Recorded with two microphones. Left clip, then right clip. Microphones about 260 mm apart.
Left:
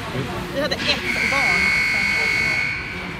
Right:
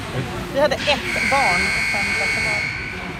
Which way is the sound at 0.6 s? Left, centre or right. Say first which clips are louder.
Right 4 dB; centre.